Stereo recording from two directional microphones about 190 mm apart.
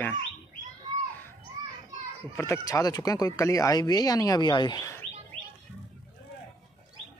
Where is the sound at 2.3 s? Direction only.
15° left (ahead or behind).